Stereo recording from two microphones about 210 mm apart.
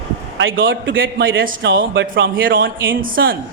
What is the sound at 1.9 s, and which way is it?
Speech, 60° right (ahead or behind).